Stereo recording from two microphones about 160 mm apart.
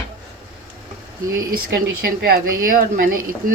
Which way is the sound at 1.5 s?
70° right (ahead or behind).